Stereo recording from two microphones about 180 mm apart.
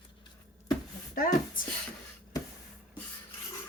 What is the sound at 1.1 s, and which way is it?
Speech, 50° left (ahead or behind).